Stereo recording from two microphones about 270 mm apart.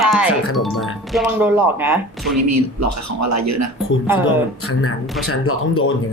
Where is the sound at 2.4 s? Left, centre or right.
Right.